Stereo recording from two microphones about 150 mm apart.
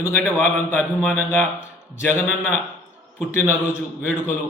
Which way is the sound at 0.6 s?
15° left (ahead or behind).